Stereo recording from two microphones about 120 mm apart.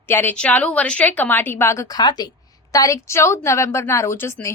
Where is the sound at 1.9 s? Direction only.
35° left (ahead or behind).